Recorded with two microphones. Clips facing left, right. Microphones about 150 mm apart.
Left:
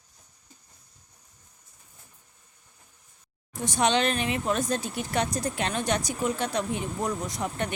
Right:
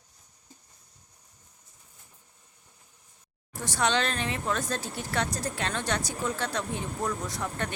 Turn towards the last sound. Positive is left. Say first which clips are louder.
# left 2 dB
turn(degrees=15)  # may be behind; listen again after turning